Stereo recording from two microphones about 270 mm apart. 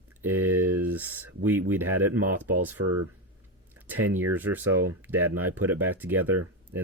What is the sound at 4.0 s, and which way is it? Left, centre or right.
Speech, right.